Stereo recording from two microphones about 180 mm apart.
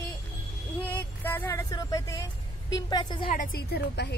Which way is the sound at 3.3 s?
50° left (ahead or behind).